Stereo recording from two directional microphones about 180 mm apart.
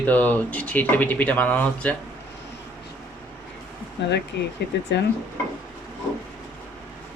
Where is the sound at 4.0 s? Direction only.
70° left (ahead or behind).